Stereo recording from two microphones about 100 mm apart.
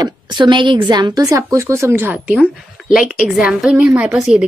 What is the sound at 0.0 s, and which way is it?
A woman's voice, 50° right (ahead or behind).